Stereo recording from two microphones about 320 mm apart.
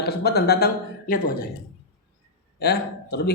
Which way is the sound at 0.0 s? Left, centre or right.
Left.